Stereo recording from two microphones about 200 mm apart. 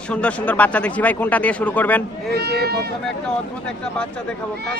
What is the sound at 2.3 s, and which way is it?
Speech, 50° right (ahead or behind).